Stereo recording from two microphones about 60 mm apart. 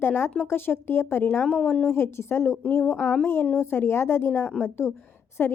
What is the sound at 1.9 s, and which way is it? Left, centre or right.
Speech, left.